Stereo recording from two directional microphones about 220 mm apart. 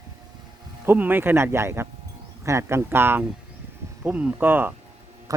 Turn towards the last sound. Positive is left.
turn(degrees=-15)  # may be behind; listen again after turning